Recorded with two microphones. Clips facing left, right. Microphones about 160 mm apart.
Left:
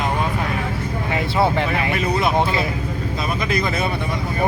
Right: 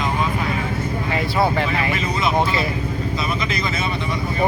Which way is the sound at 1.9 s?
55° left (ahead or behind).